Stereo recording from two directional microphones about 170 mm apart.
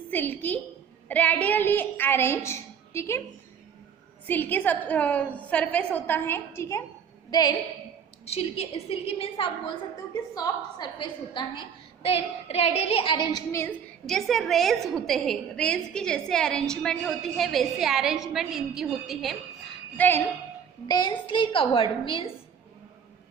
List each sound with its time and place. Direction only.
0.1 s a woman's voice: 10° left (ahead or behind)
4.3 s a woman's voice: 10° left (ahead or behind)
8.3 s a woman's voice: 35° left (ahead or behind)
10.3 s a woman's voice: 25° left (ahead or behind)
14.1 s a woman's voice: centre (ahead or behind)
20.0 s a woman's voice: 10° left (ahead or behind)
20.8 s a woman's voice: 25° left (ahead or behind)